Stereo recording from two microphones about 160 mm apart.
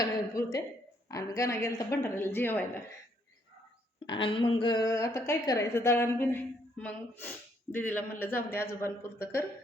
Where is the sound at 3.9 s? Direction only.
30° left (ahead or behind); by 9.4 s 15° left (ahead or behind).